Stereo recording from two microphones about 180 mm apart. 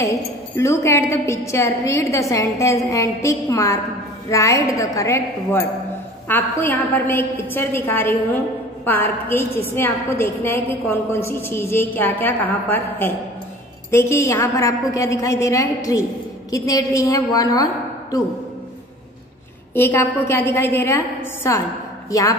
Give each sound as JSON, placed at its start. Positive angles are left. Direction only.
{"t": 0.0, "sound": "a woman's voice", "side_deg": 15}
{"t": 19.7, "sound": "a woman's voice", "side_deg": 10}